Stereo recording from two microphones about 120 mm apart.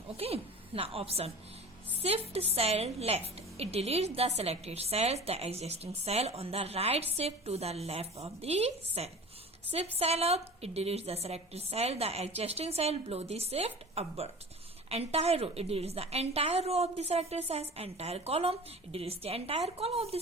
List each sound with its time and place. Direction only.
0.2 s a woman's voice: 55° right (ahead or behind)